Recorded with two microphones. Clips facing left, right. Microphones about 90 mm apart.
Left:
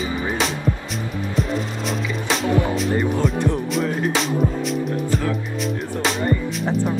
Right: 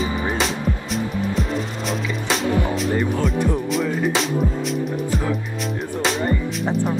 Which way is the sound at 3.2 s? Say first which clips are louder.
Even; centre (ahead or behind).